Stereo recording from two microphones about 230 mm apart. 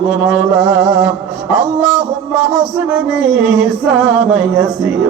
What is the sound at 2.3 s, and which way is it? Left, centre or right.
Mantra, centre.